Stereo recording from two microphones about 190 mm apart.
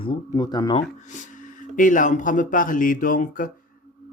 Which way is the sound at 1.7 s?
40° left (ahead or behind).